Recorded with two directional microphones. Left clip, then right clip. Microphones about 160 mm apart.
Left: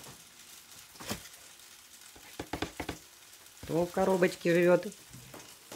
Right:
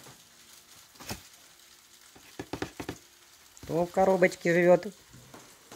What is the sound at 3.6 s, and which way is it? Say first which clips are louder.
Speech: right 4 dB; 25° right (ahead or behind).